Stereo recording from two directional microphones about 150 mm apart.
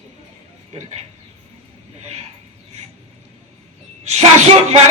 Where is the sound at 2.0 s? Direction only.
45° right (ahead or behind).